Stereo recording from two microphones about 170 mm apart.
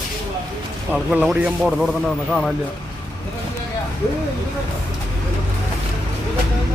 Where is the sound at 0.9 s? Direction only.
5° right (ahead or behind).